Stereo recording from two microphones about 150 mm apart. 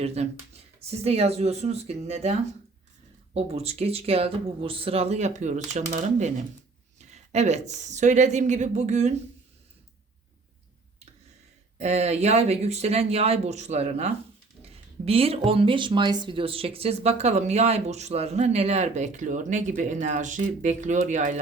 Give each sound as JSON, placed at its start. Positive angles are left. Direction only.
{"t": 0.0, "sound": "speech", "side_deg": -45}
{"t": 3.3, "sound": "speech", "side_deg": -45}
{"t": 11.8, "sound": "speech", "side_deg": -45}